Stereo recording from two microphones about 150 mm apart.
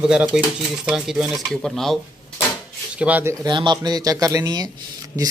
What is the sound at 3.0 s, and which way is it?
Speech, 10° right (ahead or behind).